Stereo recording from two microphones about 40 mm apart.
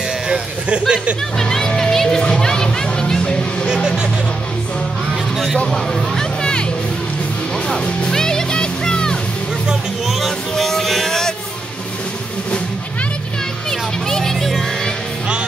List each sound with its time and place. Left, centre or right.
0.3 s a sound: right
1.4 s music: centre
3.6 s music: centre
5.7 s speech: centre
8.1 s music: centre
10.5 s music: centre
13.7 s a sound: centre